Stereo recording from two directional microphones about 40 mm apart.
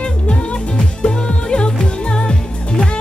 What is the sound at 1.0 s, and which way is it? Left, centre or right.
Music, left.